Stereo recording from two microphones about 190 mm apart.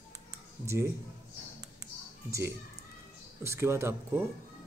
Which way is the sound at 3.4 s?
15° right (ahead or behind).